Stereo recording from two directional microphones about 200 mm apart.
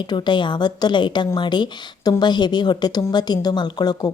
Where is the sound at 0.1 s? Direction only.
25° left (ahead or behind).